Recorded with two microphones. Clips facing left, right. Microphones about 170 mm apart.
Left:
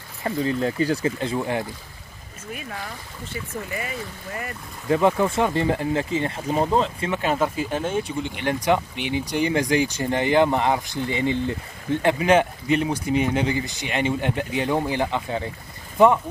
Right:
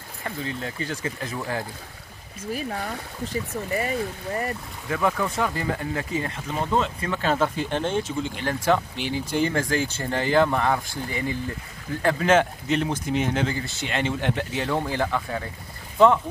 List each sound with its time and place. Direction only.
0.2 s speech: 35° left (ahead or behind)
3.3 s speech: 35° right (ahead or behind)
4.8 s speech: 25° left (ahead or behind)
7.1 s speech: 15° left (ahead or behind)
8.2 s speech: 60° left (ahead or behind)
8.5 s speech: 15° left (ahead or behind)
12.2 s speech: 10° left (ahead or behind)